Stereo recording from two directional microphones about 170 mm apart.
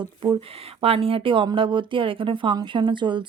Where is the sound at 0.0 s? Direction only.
30° right (ahead or behind).